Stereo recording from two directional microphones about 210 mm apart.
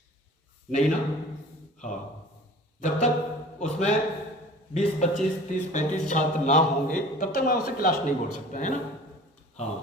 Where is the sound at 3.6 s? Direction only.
35° left (ahead or behind).